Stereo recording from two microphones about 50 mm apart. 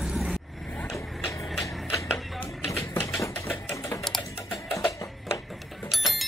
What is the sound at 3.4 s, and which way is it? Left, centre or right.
Sewing machine, left.